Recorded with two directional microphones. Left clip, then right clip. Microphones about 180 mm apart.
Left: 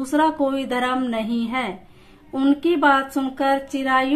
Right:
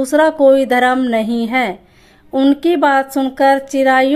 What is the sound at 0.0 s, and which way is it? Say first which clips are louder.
Speech: right 9 dB; 40° right (ahead or behind).